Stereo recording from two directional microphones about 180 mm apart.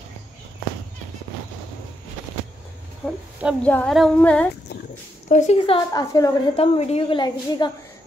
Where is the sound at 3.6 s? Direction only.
5° left (ahead or behind).